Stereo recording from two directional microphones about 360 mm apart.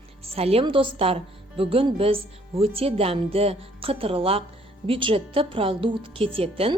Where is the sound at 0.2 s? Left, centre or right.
Centre.